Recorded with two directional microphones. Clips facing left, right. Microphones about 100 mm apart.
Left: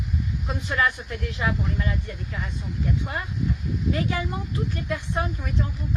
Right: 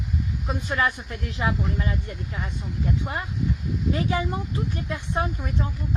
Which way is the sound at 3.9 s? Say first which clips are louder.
Right 2 dB; 25° right (ahead or behind).